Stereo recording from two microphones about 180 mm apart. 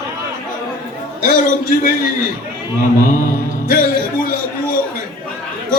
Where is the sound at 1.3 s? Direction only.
65° right (ahead or behind).